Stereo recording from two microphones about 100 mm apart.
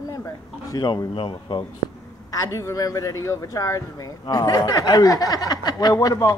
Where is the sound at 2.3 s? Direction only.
35° left (ahead or behind).